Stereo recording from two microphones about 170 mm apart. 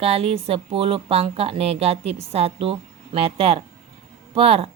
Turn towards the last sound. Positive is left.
turn(degrees=-35)  # may be behind; listen again after turning